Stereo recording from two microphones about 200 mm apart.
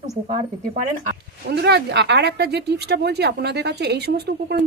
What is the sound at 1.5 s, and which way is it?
Speech, 55° right (ahead or behind).